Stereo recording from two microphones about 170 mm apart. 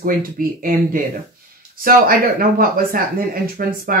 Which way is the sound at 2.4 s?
55° right (ahead or behind).